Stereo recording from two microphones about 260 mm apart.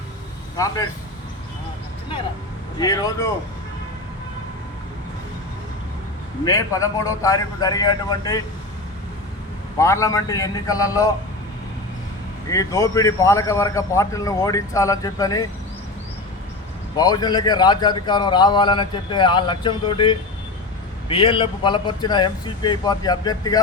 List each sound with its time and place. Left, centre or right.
0.5 s a man's voice: centre
2.7 s a man's voice: centre
6.4 s a man's voice: centre
9.7 s a man's voice: centre
12.5 s a man's voice: centre
17.0 s a man's voice: centre